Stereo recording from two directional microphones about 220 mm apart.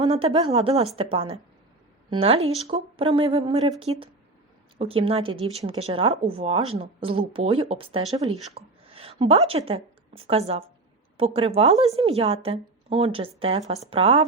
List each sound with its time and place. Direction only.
0.0 s a woman's voice: 25° right (ahead or behind)